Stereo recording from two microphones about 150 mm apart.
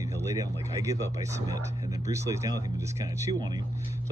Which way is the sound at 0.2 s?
20° right (ahead or behind).